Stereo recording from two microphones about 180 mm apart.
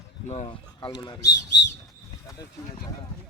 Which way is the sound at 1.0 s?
20° left (ahead or behind).